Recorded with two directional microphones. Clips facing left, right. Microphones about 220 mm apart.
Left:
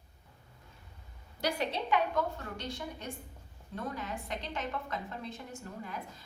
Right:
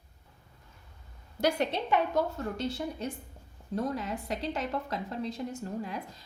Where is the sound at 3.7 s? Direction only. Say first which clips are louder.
Right 7 dB; 35° right (ahead or behind).